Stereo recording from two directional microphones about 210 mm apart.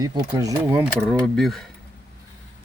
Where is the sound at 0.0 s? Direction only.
15° right (ahead or behind).